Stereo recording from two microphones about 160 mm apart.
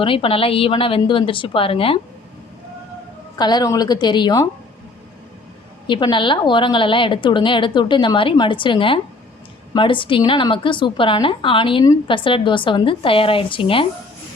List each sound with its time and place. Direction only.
0.0 s a woman's voice: 35° left (ahead or behind)
3.3 s a woman's voice: 25° left (ahead or behind)
5.9 s a woman's voice: 30° left (ahead or behind)